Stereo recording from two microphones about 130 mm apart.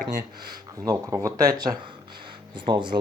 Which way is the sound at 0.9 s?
25° right (ahead or behind).